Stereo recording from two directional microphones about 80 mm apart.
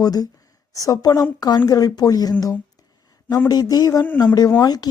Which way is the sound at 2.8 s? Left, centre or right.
Left.